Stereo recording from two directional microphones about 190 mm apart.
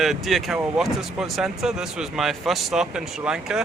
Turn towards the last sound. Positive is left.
turn(degrees=-5)  # may be behind; listen again after turning